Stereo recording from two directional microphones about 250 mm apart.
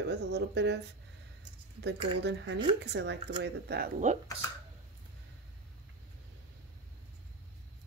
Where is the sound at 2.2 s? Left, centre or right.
Right.